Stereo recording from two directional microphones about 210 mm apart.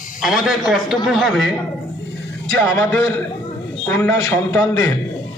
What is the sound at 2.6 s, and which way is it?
A man's voice, 10° left (ahead or behind).